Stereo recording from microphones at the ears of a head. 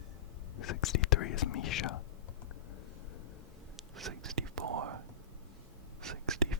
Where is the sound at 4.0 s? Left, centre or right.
Right.